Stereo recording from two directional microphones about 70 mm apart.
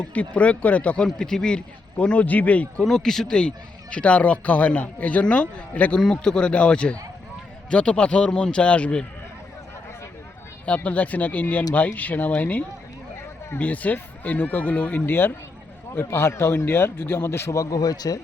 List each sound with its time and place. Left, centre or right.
0.0 s a man's voice: centre
2.8 s a man's voice: centre
10.8 s a man's voice: left